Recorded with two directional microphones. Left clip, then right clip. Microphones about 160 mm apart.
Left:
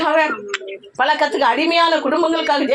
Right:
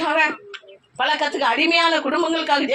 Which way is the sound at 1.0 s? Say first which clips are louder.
Left 4 dB; 40° left (ahead or behind).